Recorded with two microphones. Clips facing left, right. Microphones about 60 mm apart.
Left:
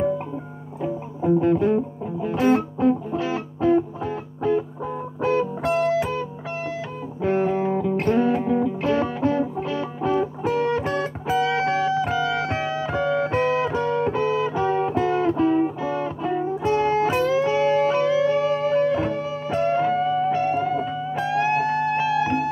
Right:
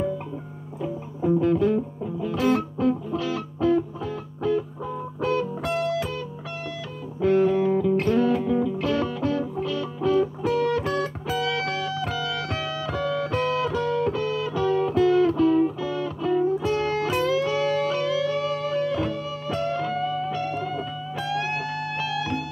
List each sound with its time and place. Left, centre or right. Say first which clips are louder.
0.8 s music: left 2 dB; left